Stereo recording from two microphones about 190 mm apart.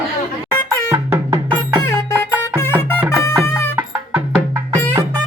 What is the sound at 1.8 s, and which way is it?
Music, 15° left (ahead or behind).